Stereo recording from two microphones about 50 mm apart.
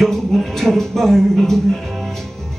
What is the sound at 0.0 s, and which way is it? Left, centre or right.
Speech, centre.